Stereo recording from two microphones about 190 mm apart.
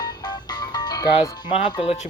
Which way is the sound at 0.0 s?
20° left (ahead or behind).